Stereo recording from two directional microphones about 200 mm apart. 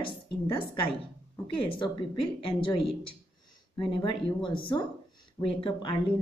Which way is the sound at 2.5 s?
25° left (ahead or behind).